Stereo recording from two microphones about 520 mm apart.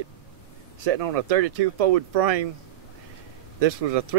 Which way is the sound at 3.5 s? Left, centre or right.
Right.